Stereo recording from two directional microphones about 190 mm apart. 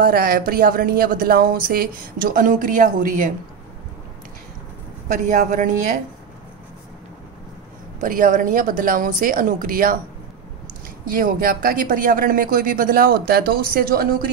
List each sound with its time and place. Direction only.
0.0 s speech: 50° right (ahead or behind)
5.0 s speech: 45° right (ahead or behind)
8.0 s speech: 45° right (ahead or behind)
11.1 s speech: 45° right (ahead or behind)